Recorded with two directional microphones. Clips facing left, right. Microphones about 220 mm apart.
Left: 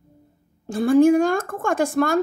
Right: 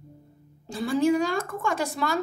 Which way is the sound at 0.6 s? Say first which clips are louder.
Left 9 dB; 50° left (ahead or behind).